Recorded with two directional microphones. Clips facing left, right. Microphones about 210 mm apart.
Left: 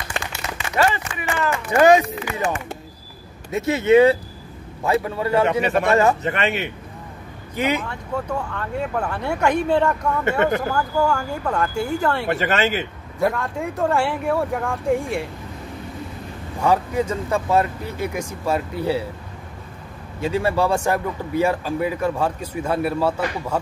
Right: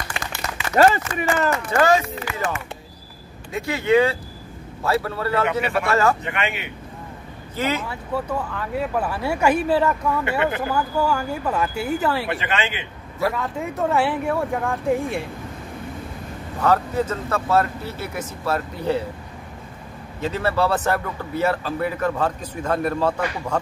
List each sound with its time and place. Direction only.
0.7 s a man's voice: 40° right (ahead or behind)
1.7 s a man's voice: 15° left (ahead or behind)
3.5 s a man's voice: 20° left (ahead or behind)
5.4 s speech: 35° left (ahead or behind)
5.9 s speech: 20° left (ahead or behind)
6.2 s speech: 40° left (ahead or behind)
7.5 s a man's voice: 15° left (ahead or behind)
7.8 s speech: 5° right (ahead or behind)
12.3 s speech: 40° left (ahead or behind)
13.3 s speech: centre (ahead or behind)
16.6 s a man's voice: 10° left (ahead or behind)
20.2 s a man's voice: 10° left (ahead or behind)